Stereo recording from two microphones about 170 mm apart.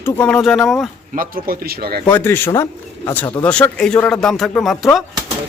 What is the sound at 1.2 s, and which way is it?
Speech, 55° right (ahead or behind).